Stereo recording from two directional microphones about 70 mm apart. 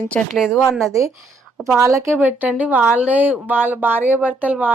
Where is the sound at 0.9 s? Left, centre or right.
Right.